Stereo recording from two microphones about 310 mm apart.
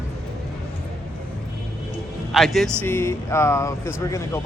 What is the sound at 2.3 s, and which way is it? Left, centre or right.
Speech, centre.